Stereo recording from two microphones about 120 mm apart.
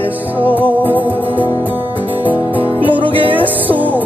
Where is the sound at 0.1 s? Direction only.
15° right (ahead or behind).